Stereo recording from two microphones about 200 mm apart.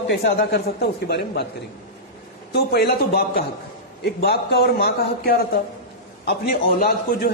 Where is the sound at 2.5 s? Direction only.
55° left (ahead or behind).